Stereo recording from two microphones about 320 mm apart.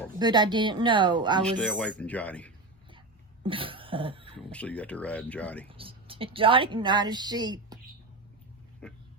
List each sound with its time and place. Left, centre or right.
0.2 s a woman's voice: centre
1.4 s speech: centre
3.4 s cough: centre
4.4 s speech: centre
5.6 s a woman's voice: centre
8.8 s speech: centre